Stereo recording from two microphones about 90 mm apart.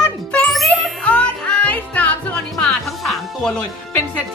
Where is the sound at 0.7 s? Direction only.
10° left (ahead or behind).